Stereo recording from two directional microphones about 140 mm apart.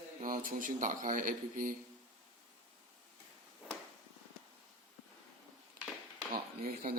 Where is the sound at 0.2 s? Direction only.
80° right.